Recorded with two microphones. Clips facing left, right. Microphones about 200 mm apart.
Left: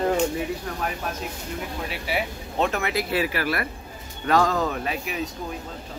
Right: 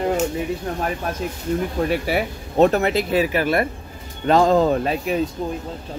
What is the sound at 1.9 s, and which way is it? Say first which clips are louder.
Speech: right 7 dB; 45° right (ahead or behind).